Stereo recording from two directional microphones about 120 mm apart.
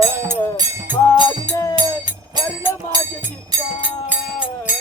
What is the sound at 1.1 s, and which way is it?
Music, 20° left (ahead or behind).